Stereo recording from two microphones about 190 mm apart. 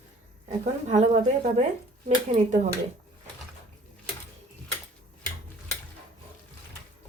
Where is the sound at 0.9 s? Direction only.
40° right (ahead or behind).